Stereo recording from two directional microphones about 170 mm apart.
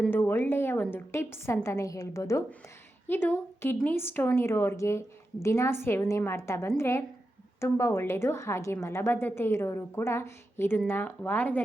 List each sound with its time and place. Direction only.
0.1 s a woman's voice: 10° left (ahead or behind)